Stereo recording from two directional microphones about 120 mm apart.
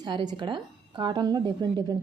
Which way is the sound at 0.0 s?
40° right (ahead or behind).